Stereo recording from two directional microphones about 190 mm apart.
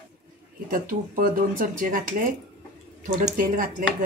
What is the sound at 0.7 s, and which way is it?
Speech, 45° right (ahead or behind).